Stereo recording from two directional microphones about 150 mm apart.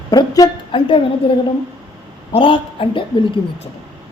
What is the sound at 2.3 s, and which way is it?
Speech, 35° left (ahead or behind).